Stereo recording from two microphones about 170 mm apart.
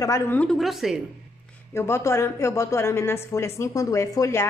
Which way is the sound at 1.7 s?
15° left (ahead or behind).